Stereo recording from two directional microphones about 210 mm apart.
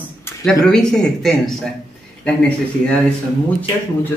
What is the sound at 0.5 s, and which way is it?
Speech, 5° left (ahead or behind).